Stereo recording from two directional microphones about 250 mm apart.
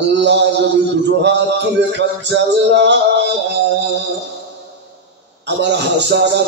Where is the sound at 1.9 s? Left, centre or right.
Right.